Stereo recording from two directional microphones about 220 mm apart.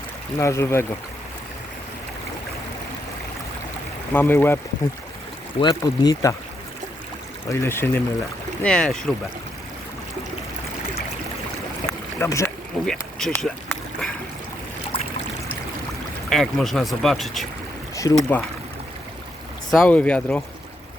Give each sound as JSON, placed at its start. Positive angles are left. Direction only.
{"t": 0.3, "sound": "speech", "side_deg": 10}
{"t": 4.1, "sound": "speech", "side_deg": 10}
{"t": 5.5, "sound": "speech", "side_deg": 20}
{"t": 7.5, "sound": "speech", "side_deg": 10}
{"t": 11.9, "sound": "boat", "side_deg": 10}
{"t": 12.9, "sound": "speech", "side_deg": 0}
{"t": 14.9, "sound": "trickle", "side_deg": 25}
{"t": 16.3, "sound": "speech", "side_deg": 0}
{"t": 17.9, "sound": "speech", "side_deg": 15}
{"t": 19.7, "sound": "speech", "side_deg": 5}